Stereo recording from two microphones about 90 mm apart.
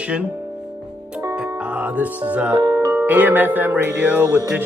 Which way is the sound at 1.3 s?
15° right (ahead or behind).